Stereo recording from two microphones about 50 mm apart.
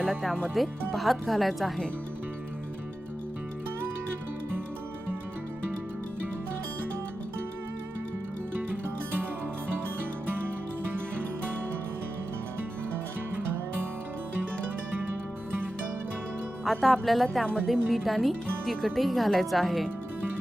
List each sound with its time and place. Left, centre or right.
0.0 s speech: centre
10.2 s music: right
16.6 s music: centre
17.4 s speech: centre